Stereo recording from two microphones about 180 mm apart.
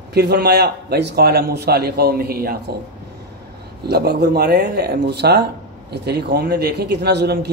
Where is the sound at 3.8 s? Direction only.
65° right (ahead or behind).